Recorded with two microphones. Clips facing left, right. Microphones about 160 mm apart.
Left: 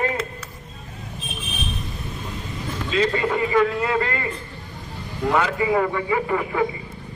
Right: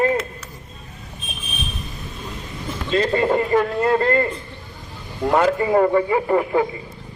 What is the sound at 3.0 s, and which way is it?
Speech, 40° right (ahead or behind).